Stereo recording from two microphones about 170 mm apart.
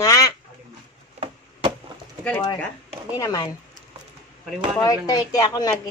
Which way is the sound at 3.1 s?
20° left (ahead or behind).